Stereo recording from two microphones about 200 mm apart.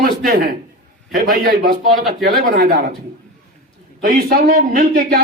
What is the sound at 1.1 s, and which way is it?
Speech, 55° right (ahead or behind).